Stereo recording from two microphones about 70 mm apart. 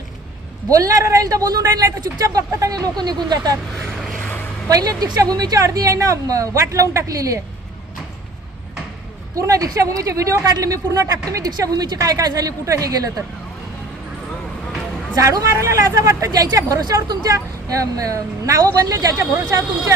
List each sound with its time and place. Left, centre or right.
0.7 s speech: right
4.7 s speech: right
5.6 s speech: right
9.3 s speech: right
15.1 s a woman's voice: right
15.4 s speech: right
17.2 s speech: right